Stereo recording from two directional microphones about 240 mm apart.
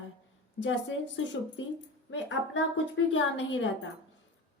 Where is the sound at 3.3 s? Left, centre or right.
Left.